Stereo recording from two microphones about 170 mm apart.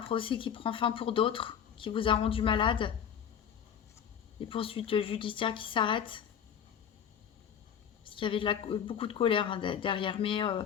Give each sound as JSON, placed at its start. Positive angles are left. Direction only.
{"t": 0.0, "sound": "speech", "side_deg": 30}
{"t": 4.4, "sound": "speech", "side_deg": 30}
{"t": 8.0, "sound": "speech", "side_deg": 30}